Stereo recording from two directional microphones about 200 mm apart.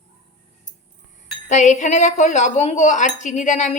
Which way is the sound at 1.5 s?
35° left (ahead or behind).